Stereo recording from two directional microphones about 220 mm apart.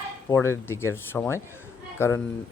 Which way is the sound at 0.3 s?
10° left (ahead or behind).